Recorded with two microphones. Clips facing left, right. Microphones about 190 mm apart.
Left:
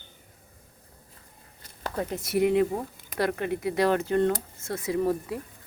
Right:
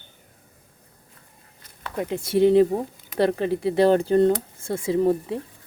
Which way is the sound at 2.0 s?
30° right (ahead or behind).